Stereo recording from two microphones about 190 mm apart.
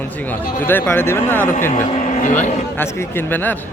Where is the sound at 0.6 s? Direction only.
10° left (ahead or behind).